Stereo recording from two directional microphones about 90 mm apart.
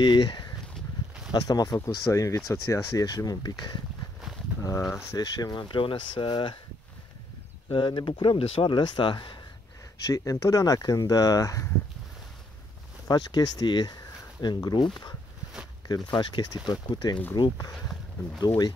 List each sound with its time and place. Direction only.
0.0 s speech: 55° left (ahead or behind)
2.0 s speech: 35° left (ahead or behind)
4.6 s speech: 35° left (ahead or behind); by 6.6 s 65° left (ahead or behind)
7.7 s speech: 65° left (ahead or behind)
10.0 s speech: 40° left (ahead or behind)
13.1 s speech: 50° left (ahead or behind)
15.9 s speech: 50° left (ahead or behind)